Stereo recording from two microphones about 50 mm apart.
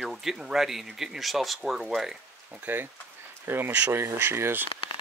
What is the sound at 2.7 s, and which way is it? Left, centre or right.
Speech, right.